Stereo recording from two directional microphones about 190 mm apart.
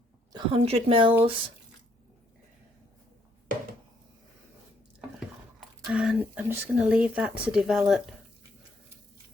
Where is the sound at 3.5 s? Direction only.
45° right (ahead or behind).